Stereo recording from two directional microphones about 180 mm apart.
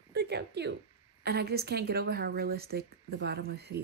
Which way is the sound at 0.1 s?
70° right (ahead or behind).